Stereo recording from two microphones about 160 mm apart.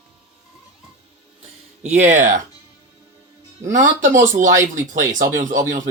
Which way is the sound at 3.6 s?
55° right (ahead or behind).